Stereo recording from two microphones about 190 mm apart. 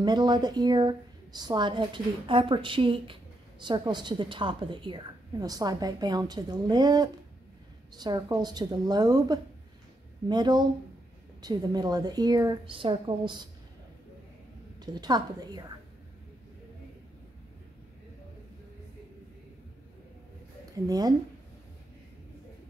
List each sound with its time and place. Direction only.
0.0 s a woman's voice: 25° right (ahead or behind)
14.9 s a woman's voice: 20° right (ahead or behind)
20.7 s a woman's voice: 20° right (ahead or behind)